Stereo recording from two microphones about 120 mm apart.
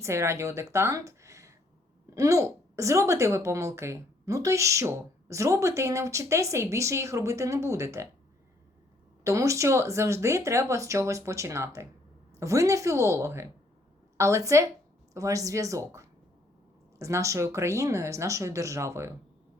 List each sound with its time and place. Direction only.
0.0 s speech: 25° right (ahead or behind)
9.2 s speech: 25° right (ahead or behind)